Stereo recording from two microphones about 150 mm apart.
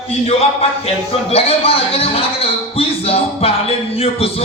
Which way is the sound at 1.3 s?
40° left (ahead or behind).